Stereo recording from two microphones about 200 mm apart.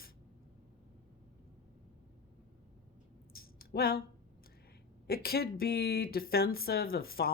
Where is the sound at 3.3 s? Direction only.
50° left (ahead or behind).